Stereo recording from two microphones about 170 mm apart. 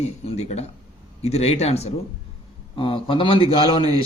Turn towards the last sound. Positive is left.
turn(degrees=30)  # may be behind; listen again after turning